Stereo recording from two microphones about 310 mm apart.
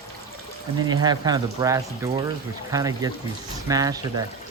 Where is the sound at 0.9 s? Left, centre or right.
Centre.